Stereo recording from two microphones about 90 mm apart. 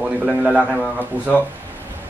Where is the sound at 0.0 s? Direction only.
10° right (ahead or behind).